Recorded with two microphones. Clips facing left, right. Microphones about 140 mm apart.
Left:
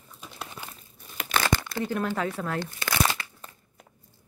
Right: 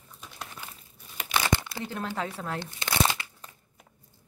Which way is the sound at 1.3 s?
15° right (ahead or behind).